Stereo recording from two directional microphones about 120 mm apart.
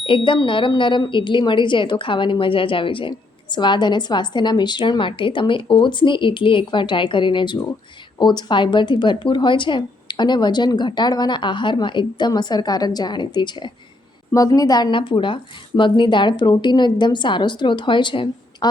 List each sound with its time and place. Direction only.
0.0 s speech: 45° left (ahead or behind)